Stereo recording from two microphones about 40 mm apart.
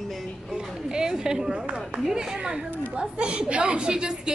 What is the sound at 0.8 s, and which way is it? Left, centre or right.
A woman's voice, centre.